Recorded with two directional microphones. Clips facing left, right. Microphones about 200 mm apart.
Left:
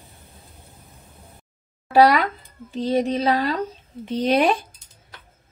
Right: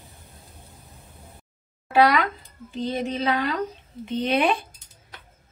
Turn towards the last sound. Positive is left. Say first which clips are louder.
# left 3 dB
turn(degrees=40)  # may be behind; listen again after turning